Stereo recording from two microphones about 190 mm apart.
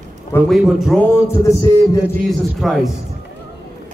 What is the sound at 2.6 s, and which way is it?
Speech, centre (ahead or behind).